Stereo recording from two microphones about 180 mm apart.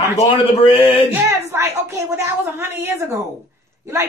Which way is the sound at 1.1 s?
15° right (ahead or behind).